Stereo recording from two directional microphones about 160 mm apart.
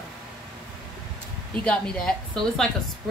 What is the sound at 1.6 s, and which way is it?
A woman's voice, 5° left (ahead or behind).